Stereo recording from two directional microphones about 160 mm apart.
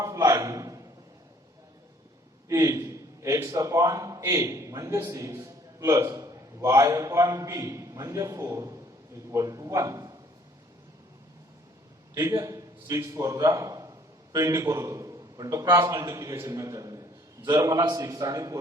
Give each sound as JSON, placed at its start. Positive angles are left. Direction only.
{"t": 0.0, "sound": "a sound", "side_deg": -20}
{"t": 2.5, "sound": "a man's voice", "side_deg": -20}
{"t": 12.1, "sound": "a man's voice", "side_deg": -20}